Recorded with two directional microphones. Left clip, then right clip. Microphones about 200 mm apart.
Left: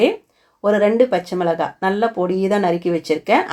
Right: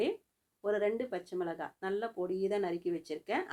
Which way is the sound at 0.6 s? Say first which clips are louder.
Left 18 dB; 30° right (ahead or behind).